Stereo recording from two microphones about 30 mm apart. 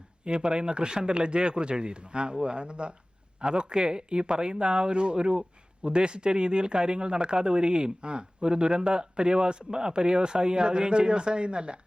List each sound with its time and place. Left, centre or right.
0.3 s speech: right